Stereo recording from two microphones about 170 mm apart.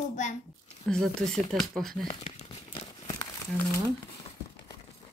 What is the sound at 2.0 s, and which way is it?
Crumpling, 35° left (ahead or behind).